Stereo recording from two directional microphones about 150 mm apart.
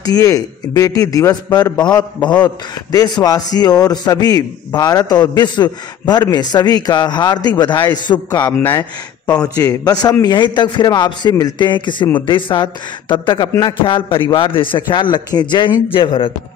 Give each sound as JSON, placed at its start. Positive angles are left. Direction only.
{"t": 0.0, "sound": "a man's voice", "side_deg": 25}